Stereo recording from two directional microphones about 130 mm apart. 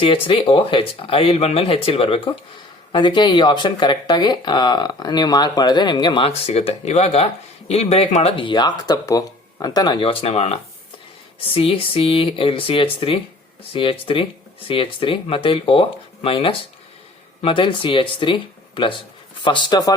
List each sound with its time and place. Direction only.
0.0 s speech: 45° left (ahead or behind)
8.4 s speech: 35° left (ahead or behind)